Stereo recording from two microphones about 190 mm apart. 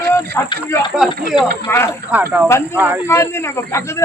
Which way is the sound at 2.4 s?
15° left (ahead or behind).